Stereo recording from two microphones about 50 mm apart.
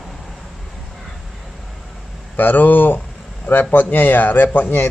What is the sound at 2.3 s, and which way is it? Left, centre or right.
Speech, left.